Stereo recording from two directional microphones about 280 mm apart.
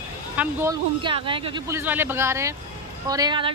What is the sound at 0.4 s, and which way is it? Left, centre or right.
A man's voice, centre.